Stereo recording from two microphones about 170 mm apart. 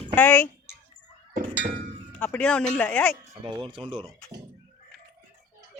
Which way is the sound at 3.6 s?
30° right (ahead or behind).